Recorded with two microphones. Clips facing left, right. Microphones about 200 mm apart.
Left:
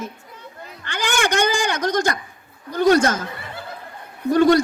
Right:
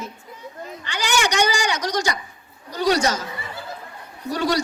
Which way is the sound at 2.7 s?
50° left (ahead or behind).